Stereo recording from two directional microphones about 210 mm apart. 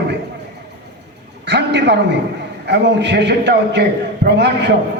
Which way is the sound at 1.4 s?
55° right (ahead or behind).